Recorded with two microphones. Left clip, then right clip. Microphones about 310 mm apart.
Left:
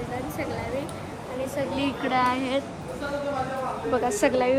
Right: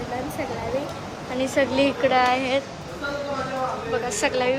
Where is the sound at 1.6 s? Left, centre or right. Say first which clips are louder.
Right 9 dB; right.